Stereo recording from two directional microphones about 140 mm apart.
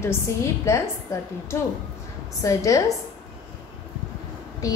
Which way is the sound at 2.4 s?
25° left (ahead or behind).